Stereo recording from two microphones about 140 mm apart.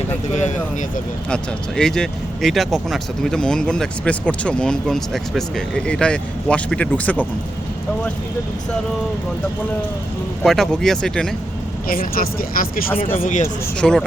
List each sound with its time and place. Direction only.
1.3 s speech: 5° left (ahead or behind)
10.4 s speech: centre (ahead or behind)
11.9 s speech: 90° left
13.2 s speech: 60° left (ahead or behind)
13.8 s speech: centre (ahead or behind)